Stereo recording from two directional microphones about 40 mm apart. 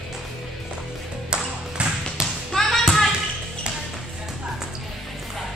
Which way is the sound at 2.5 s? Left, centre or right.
Centre.